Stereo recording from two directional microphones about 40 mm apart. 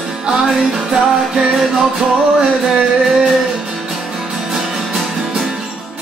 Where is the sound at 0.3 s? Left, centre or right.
Centre.